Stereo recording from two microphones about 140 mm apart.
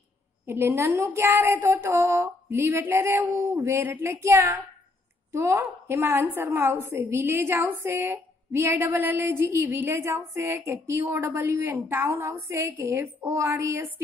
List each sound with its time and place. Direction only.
0.5 s a woman's voice: 15° right (ahead or behind)